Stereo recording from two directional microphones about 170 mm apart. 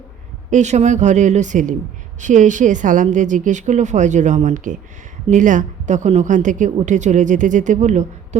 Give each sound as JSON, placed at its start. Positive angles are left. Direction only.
{"t": 0.5, "sound": "a woman's voice", "side_deg": -45}